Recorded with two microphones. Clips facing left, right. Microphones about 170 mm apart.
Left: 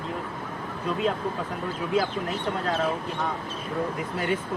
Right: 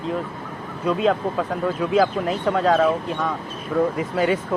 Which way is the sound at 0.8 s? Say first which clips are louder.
Right 7 dB; 90° right.